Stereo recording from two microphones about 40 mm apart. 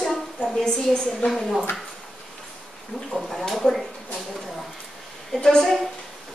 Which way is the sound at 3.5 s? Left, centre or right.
Centre.